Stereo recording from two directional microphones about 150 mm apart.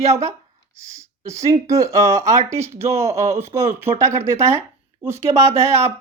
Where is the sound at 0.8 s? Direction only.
20° right (ahead or behind).